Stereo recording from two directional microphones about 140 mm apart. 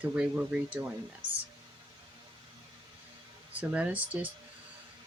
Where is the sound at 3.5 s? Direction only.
10° right (ahead or behind).